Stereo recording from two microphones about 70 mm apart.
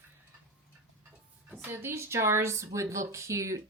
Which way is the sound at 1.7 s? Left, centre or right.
Right.